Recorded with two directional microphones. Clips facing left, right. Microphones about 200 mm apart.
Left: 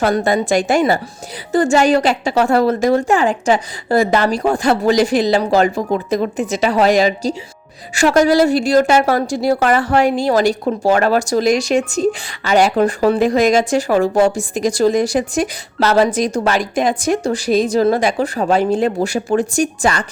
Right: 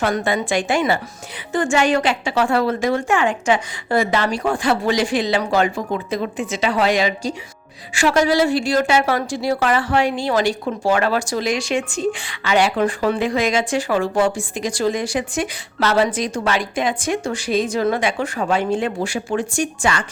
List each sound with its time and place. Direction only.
0.0 s speech: 40° left (ahead or behind)